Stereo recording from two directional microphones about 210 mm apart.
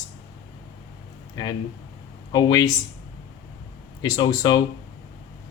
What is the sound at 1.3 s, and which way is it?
Speech, 20° left (ahead or behind).